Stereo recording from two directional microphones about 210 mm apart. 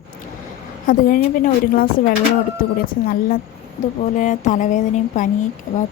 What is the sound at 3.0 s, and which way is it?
A woman's voice, 45° left (ahead or behind).